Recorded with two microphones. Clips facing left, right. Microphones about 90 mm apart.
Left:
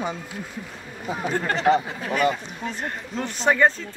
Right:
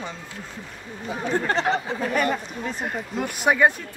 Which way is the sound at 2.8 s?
10° right (ahead or behind).